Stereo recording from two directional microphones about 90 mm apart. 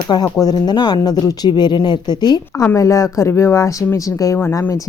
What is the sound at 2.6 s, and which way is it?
Speech, 35° left (ahead or behind).